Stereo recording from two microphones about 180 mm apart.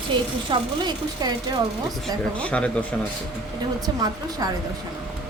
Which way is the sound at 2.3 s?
5° left (ahead or behind).